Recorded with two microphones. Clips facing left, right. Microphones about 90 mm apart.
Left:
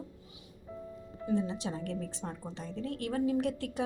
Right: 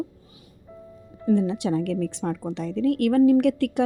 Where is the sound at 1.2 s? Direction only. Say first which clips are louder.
Right 10 dB; 70° right (ahead or behind).